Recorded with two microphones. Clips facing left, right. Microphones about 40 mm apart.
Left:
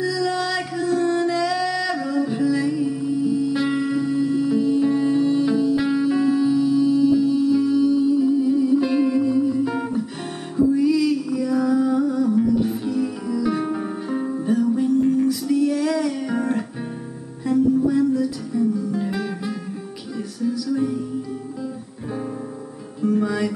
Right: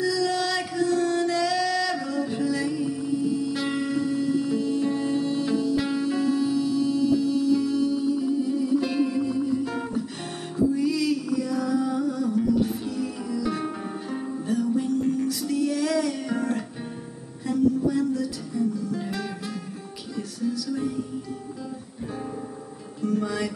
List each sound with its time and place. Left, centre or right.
0.0 s music: centre
23.2 s music: centre